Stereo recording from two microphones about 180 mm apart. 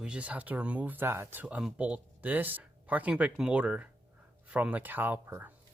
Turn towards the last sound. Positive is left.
turn(degrees=-10)  # may be behind; listen again after turning